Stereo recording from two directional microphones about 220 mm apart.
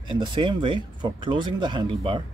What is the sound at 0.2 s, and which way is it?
Speech, 20° right (ahead or behind).